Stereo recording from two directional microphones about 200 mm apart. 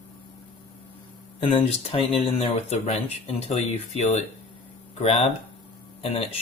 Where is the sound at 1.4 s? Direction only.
25° left (ahead or behind).